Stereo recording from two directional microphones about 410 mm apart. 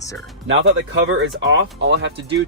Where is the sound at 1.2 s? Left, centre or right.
Right.